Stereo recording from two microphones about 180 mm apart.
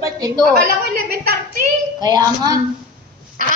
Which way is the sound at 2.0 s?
20° right (ahead or behind).